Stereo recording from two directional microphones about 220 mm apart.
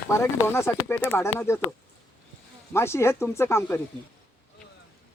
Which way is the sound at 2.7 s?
10° left (ahead or behind).